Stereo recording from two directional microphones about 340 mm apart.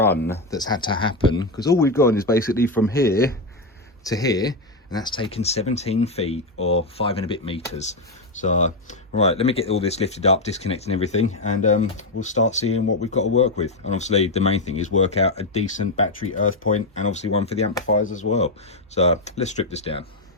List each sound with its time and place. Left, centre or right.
0.3 s speech: centre